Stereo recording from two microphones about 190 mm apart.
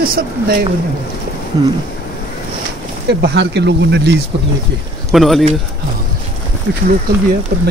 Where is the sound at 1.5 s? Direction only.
20° right (ahead or behind).